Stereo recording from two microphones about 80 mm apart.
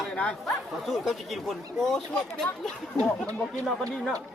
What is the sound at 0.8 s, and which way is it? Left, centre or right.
Speech, centre.